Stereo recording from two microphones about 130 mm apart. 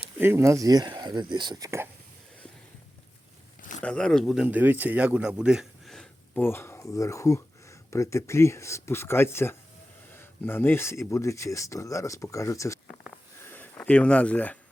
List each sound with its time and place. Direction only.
0.2 s speech: 20° right (ahead or behind)
3.6 s a sound: 80° left
3.8 s speech: 5° left (ahead or behind)
4.4 s speech: 15° right (ahead or behind); by 6.1 s centre (ahead or behind)
6.3 s speech: 15° left (ahead or behind)
13.4 s a sound: 15° left (ahead or behind)